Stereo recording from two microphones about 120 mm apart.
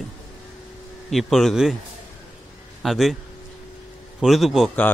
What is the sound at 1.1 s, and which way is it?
Speech, centre (ahead or behind).